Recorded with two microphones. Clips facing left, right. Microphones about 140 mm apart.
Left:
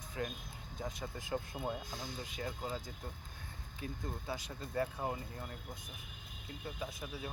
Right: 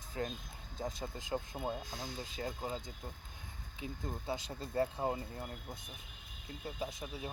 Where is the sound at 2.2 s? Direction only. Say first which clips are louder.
Right 1 dB; 30° right (ahead or behind).